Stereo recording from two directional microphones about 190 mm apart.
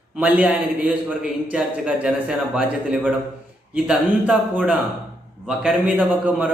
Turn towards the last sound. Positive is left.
turn(degrees=-10)  # may be behind; listen again after turning